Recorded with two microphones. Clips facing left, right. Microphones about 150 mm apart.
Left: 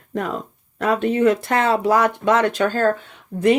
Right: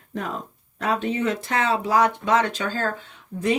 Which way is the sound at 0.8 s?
55° left (ahead or behind).